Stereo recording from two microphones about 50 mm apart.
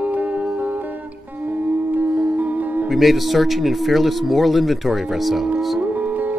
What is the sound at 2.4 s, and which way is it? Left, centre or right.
Music, right.